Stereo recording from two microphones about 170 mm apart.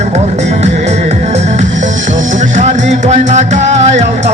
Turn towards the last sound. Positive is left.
turn(degrees=-40)  # may be behind; listen again after turning